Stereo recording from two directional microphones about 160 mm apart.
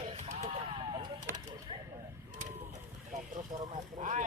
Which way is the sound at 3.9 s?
50° right (ahead or behind).